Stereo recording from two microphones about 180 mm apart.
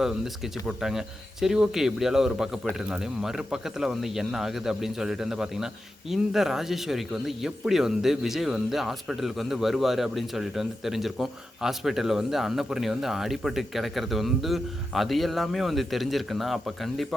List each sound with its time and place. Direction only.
0.8 s speech: centre (ahead or behind)